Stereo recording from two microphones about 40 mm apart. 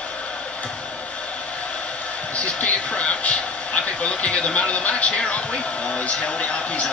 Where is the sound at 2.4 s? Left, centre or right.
Left.